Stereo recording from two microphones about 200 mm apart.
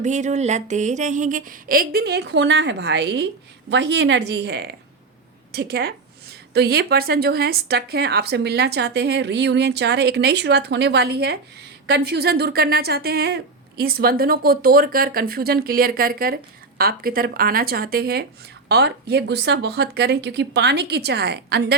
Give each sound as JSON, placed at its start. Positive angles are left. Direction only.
{"t": 0.0, "sound": "a woman's voice", "side_deg": -35}